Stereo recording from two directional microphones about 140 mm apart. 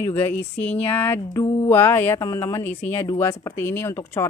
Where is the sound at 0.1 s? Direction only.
15° left (ahead or behind).